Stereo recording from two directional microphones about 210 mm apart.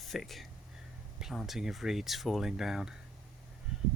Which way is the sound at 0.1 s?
Centre (ahead or behind).